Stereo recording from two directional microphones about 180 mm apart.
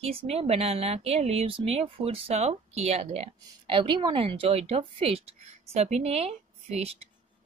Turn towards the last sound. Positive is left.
turn(degrees=-35)  # may be behind; listen again after turning